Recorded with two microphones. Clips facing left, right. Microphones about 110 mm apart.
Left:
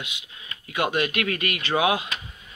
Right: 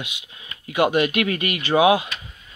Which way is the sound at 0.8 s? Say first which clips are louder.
Right 5 dB; 20° right (ahead or behind).